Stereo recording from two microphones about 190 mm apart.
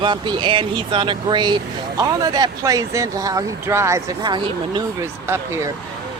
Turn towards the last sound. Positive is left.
turn(degrees=-15)  # may be behind; listen again after turning